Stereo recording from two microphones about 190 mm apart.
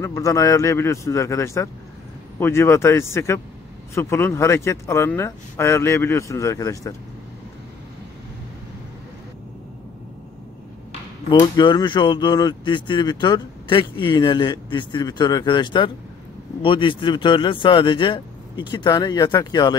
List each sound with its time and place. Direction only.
0.0 s speech: 15° left (ahead or behind)
11.3 s speech: 25° left (ahead or behind)